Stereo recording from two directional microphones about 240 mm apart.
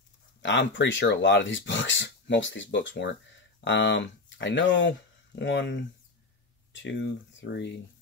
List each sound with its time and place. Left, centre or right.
0.4 s speech: left